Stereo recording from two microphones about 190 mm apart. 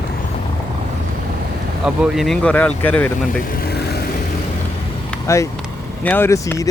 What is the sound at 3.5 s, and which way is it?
Vehicle, 55° left (ahead or behind).